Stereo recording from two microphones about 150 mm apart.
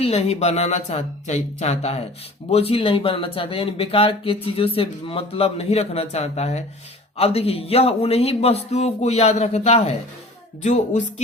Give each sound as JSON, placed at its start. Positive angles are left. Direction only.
{"t": 0.0, "sound": "speech", "side_deg": 45}